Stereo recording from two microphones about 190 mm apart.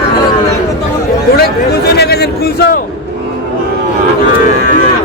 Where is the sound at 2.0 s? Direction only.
60° left (ahead or behind).